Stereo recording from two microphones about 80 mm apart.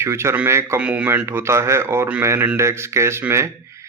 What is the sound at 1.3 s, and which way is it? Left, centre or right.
A man's voice, right.